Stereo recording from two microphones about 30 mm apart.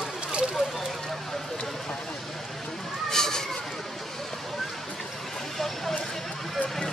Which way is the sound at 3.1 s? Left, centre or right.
Centre.